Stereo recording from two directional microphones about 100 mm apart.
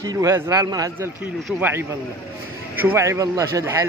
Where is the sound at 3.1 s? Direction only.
35° right (ahead or behind).